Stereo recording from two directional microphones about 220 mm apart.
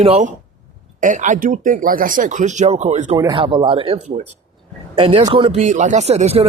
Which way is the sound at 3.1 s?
20° right (ahead or behind).